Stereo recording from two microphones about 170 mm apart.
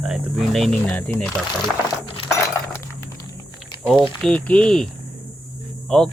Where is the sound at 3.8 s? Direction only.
10° right (ahead or behind).